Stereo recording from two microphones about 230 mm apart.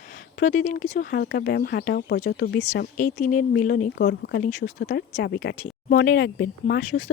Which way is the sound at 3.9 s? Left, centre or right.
Left.